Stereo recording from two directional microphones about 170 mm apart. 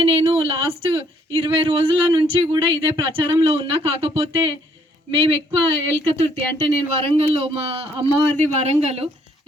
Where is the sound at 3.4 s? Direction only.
35° right (ahead or behind).